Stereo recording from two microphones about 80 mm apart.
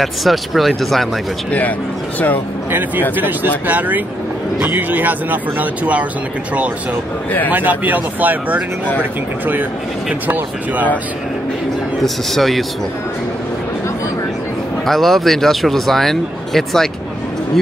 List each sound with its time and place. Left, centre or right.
0.0 s speech: centre
3.2 s speech: right
7.5 s speech: right
10.2 s speech: right
12.0 s speech: centre
14.9 s speech: centre